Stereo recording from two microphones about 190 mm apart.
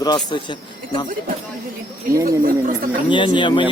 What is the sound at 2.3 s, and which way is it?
Speech, 50° right (ahead or behind).